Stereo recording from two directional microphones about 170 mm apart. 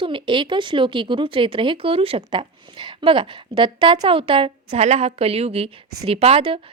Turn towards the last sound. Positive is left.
turn(degrees=-35)  # may be behind; listen again after turning